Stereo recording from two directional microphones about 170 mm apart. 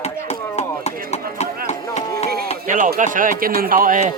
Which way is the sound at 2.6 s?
50° right (ahead or behind).